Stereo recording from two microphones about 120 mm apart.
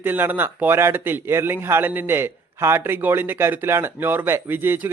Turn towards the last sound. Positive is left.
turn(degrees=-15)  # may be behind; listen again after turning